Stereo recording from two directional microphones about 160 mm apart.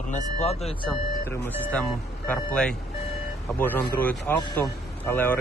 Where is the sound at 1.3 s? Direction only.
15° left (ahead or behind).